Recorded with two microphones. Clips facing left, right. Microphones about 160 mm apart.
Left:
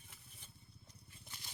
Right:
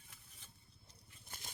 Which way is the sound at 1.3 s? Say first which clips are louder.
Right 4 dB; 50° right (ahead or behind).